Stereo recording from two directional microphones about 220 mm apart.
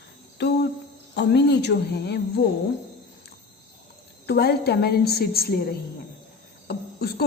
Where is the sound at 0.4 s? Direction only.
50° left (ahead or behind).